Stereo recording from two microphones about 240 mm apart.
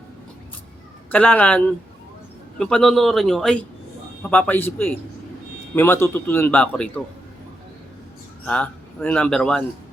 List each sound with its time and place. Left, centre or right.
1.1 s speech: centre
8.4 s speech: centre